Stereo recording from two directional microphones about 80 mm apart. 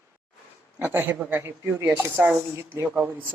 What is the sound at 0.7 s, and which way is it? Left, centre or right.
Speech, right.